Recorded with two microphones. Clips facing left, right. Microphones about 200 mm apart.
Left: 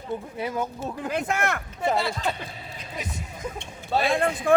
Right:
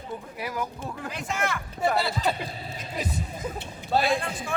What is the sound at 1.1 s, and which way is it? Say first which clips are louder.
Speech: left 4 dB; 60° left (ahead or behind).